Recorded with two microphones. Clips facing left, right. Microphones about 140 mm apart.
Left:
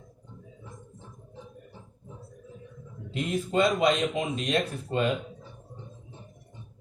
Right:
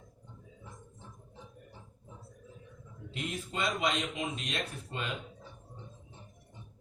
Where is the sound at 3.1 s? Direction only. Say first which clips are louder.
Left 10 dB; 40° left (ahead or behind).